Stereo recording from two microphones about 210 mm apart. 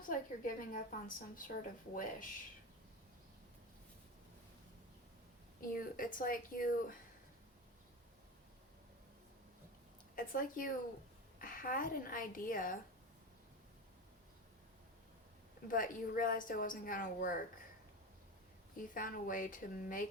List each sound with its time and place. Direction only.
0.0 s a woman's voice: 40° left (ahead or behind)
5.5 s a woman's voice: 40° left (ahead or behind)
10.2 s a woman's voice: 40° left (ahead or behind)
15.6 s a woman's voice: 40° left (ahead or behind)
18.9 s a woman's voice: 40° left (ahead or behind)